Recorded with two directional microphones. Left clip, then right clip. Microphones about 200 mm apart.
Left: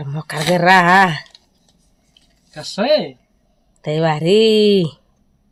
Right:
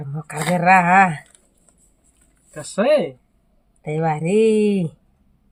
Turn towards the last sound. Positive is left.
turn(degrees=25)  # may be behind; listen again after turning